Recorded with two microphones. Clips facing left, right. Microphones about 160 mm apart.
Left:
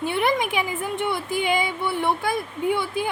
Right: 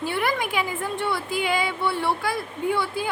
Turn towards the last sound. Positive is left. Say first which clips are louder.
# left 1 dB
turn(degrees=20)  # may be behind; listen again after turning